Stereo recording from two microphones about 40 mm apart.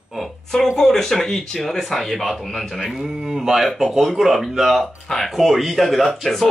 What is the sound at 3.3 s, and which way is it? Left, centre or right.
Speech, centre.